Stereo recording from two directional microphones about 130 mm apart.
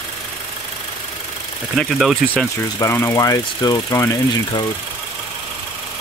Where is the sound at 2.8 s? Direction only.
20° left (ahead or behind).